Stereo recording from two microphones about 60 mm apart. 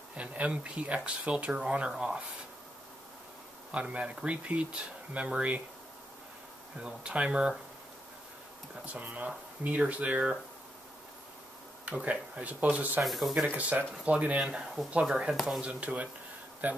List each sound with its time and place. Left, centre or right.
0.1 s speech: right
3.7 s speech: centre
6.8 s speech: centre
8.8 s speech: right
11.8 s speech: right
13.0 s speech: centre
13.5 s speech: right